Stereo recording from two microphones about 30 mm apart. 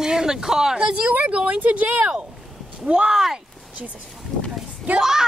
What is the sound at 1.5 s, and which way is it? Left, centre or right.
Speech, right.